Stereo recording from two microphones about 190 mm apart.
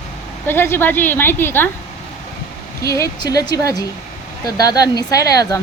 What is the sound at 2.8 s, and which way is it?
A woman's voice, 15° left (ahead or behind).